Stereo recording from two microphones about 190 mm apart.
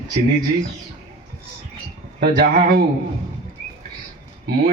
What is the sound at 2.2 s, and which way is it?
Speech, 55° right (ahead or behind).